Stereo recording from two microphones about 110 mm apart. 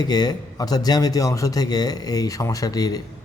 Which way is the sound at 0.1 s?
35° left (ahead or behind).